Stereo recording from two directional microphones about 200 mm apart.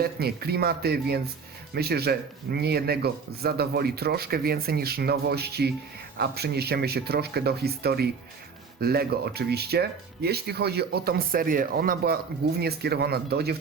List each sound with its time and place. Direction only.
0.0 s speech: 50° right (ahead or behind)